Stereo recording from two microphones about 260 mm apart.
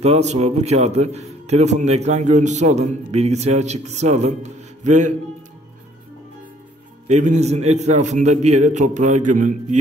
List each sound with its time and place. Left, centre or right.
0.0 s a man's voice: right
7.1 s a man's voice: right